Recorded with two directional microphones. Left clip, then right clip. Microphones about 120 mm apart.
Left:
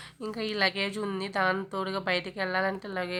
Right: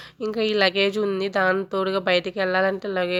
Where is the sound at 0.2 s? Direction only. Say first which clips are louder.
Right 8 dB; 40° right (ahead or behind).